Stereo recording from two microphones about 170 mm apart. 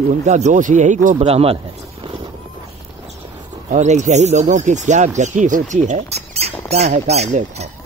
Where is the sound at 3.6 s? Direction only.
45° right (ahead or behind).